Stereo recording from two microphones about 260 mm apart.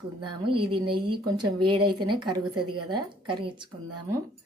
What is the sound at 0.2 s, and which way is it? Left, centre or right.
A woman's voice, centre.